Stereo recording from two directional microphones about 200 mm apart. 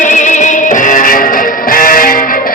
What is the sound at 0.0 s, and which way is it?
Music, 35° left (ahead or behind).